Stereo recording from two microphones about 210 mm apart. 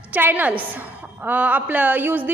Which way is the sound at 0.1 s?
10° right (ahead or behind).